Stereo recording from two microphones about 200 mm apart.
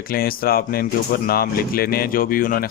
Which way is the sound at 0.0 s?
45° left (ahead or behind).